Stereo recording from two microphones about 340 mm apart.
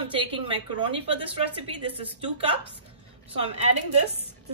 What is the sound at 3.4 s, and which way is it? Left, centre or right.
Speech, centre.